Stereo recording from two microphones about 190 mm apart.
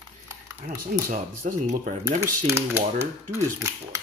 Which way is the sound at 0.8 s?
45° right (ahead or behind).